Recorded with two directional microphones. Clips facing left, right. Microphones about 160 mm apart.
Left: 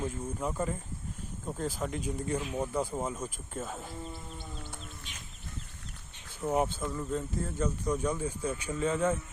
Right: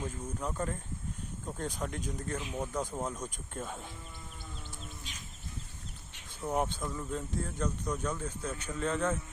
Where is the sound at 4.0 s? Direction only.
30° left (ahead or behind).